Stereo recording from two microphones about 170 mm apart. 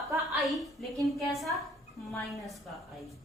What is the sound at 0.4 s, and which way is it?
A woman's voice, centre (ahead or behind).